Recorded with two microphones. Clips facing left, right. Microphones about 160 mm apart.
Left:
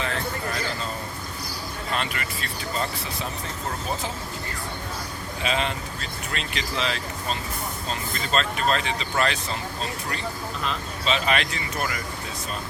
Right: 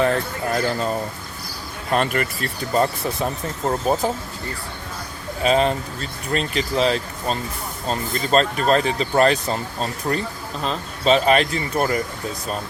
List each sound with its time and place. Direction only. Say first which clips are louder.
0.0 s speech: right 8 dB; 50° right (ahead or behind)
1.9 s speech: right 9 dB; 50° right (ahead or behind)
5.4 s speech: right 9 dB; 40° right (ahead or behind)
10.6 s speech: right 7 dB; 40° right (ahead or behind)